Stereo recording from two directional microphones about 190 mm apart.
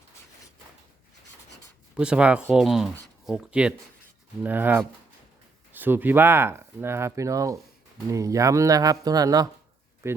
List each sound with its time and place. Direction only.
2.0 s speech: 5° right (ahead or behind)